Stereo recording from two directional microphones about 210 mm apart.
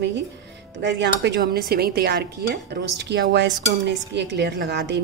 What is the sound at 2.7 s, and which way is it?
Cutlery, 50° right (ahead or behind).